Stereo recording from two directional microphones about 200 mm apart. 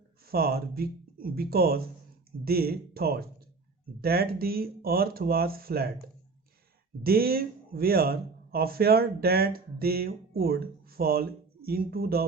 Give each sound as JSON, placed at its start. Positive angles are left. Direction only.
{"t": 0.3, "sound": "speech", "side_deg": -50}
{"t": 7.0, "sound": "speech", "side_deg": -50}